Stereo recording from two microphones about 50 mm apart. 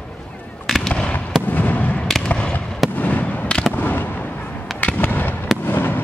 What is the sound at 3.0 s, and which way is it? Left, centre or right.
Fireworks, left.